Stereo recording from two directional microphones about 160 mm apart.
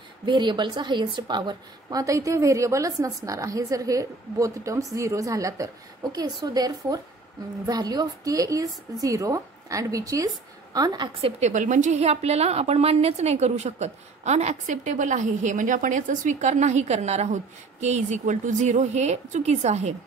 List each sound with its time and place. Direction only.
0.2 s a woman's voice: 30° right (ahead or behind); by 19.9 s 45° right (ahead or behind)